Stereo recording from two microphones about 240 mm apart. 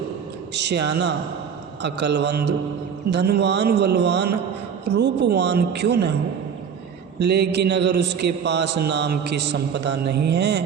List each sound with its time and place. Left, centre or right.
0.5 s mantra: right
7.2 s mantra: right